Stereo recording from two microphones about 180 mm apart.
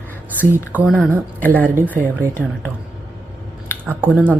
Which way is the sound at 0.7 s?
10° right (ahead or behind).